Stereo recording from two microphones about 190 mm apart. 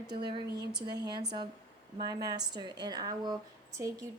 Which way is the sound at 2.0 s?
20° right (ahead or behind).